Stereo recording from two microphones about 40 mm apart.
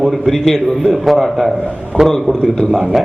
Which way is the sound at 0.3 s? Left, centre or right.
Centre.